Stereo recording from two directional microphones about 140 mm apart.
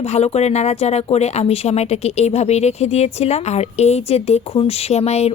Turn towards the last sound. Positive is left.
turn(degrees=50)  # may be behind; listen again after turning